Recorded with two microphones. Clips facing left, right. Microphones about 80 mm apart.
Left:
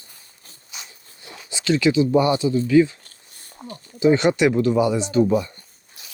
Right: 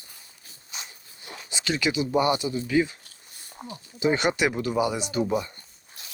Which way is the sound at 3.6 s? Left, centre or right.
Centre.